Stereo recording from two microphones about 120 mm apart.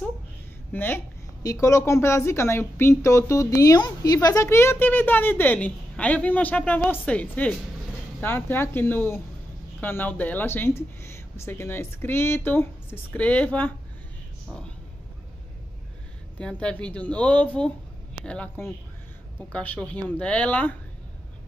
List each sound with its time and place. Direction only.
0.7 s speech: 15° left (ahead or behind)
1.4 s speech: 30° left (ahead or behind); by 13.7 s 15° left (ahead or behind)
16.3 s speech: 10° left (ahead or behind)
19.5 s speech: 10° left (ahead or behind)